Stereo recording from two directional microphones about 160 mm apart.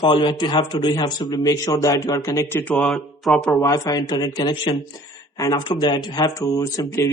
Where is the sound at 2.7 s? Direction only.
Centre (ahead or behind).